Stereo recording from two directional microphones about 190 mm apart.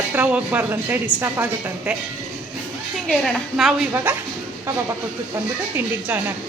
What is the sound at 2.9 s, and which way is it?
A man's voice, 5° left (ahead or behind).